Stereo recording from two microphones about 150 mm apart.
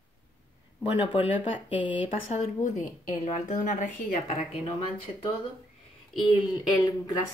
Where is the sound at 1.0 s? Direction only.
40° left (ahead or behind).